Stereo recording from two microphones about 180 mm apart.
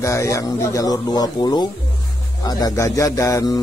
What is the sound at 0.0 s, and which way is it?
Speech, 15° left (ahead or behind).